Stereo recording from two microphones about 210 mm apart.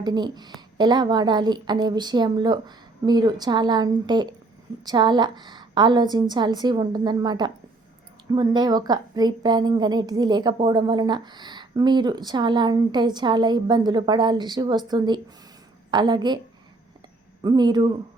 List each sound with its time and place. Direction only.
0.0 s a woman's voice: 20° right (ahead or behind)
17.4 s a woman's voice: 20° right (ahead or behind)